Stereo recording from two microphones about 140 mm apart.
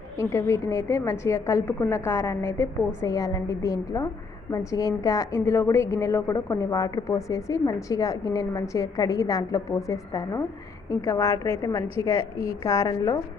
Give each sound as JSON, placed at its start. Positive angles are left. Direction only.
{"t": 0.2, "sound": "a woman's voice", "side_deg": 20}